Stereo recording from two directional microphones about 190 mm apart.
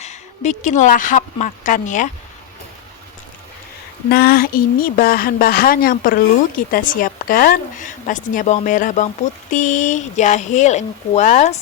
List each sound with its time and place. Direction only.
0.0 s speech: 40° left (ahead or behind)
4.1 s a woman's voice: 55° left (ahead or behind); by 11.5 s 40° left (ahead or behind)